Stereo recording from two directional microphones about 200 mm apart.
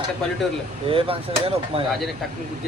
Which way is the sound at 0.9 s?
30° right (ahead or behind).